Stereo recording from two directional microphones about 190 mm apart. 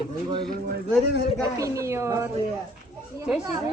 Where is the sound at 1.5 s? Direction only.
15° right (ahead or behind).